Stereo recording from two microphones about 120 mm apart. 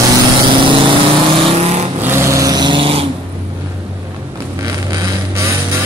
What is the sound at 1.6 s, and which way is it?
Vehicle, 60° right (ahead or behind).